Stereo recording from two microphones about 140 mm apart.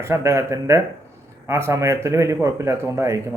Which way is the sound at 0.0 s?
20° right (ahead or behind).